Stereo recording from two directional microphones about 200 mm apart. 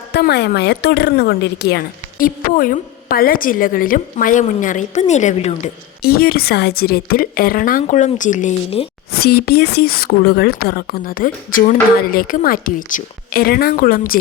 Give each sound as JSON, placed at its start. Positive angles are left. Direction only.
{"t": 0.1, "sound": "a woman's voice", "side_deg": 55}
{"t": 6.0, "sound": "a woman's voice", "side_deg": 50}
{"t": 9.1, "sound": "a woman's voice", "side_deg": 50}